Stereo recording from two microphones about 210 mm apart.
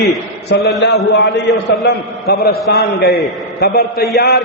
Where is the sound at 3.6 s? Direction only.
45° left (ahead or behind).